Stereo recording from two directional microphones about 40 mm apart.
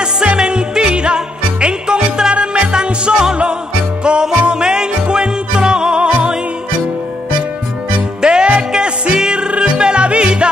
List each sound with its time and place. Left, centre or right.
0.4 s music: right
8.2 s music: right